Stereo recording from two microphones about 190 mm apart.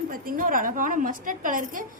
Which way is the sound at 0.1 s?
45° right (ahead or behind).